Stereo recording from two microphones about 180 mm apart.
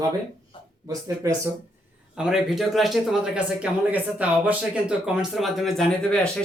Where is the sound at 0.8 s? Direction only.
15° right (ahead or behind).